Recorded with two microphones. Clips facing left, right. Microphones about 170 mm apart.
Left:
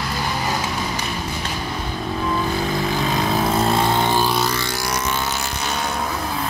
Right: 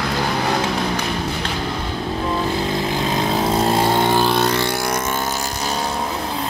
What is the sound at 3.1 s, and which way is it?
Vehicle, 25° right (ahead or behind).